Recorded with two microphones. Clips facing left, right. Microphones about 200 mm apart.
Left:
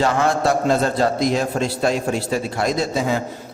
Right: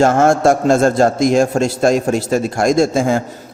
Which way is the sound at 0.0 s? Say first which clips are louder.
Right 7 dB; 50° right (ahead or behind).